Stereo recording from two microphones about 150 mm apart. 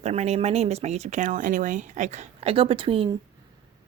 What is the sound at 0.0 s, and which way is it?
Speech, 50° right (ahead or behind).